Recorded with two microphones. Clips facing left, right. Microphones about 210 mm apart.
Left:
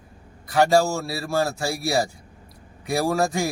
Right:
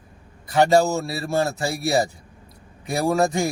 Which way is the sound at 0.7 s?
20° right (ahead or behind).